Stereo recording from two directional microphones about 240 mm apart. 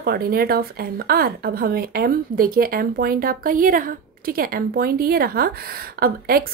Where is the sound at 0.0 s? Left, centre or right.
Right.